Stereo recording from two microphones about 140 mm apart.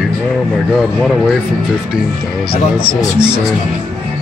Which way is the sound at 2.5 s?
90° left.